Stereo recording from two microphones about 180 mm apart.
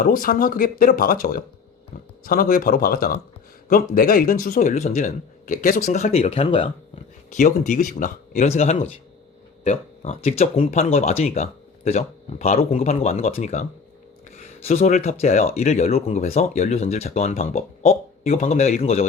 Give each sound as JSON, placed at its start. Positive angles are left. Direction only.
{"t": 0.0, "sound": "speech", "side_deg": 50}
{"t": 4.6, "sound": "speech", "side_deg": 40}
{"t": 7.3, "sound": "speech", "side_deg": 45}